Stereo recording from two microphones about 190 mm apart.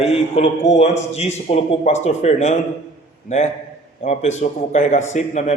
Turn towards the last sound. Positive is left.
turn(degrees=40)  # may be behind; listen again after turning